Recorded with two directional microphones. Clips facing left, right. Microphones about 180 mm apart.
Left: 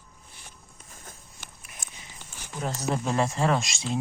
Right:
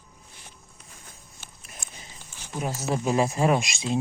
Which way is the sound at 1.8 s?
45° left (ahead or behind).